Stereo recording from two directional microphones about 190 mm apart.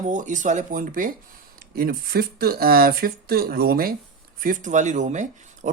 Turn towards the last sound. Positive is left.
turn(degrees=-40)  # may be behind; listen again after turning